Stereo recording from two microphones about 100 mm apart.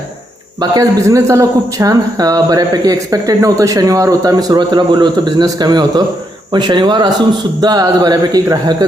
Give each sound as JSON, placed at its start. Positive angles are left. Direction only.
{"t": 0.6, "sound": "a man's voice", "side_deg": -40}